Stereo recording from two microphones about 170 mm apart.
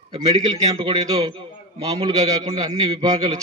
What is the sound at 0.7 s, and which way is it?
A man's voice, 20° right (ahead or behind).